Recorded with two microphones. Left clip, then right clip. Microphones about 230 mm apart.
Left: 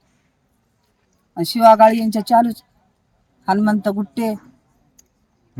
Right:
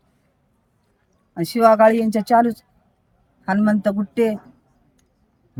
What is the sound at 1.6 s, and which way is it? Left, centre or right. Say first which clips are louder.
Speech: left 3 dB; centre.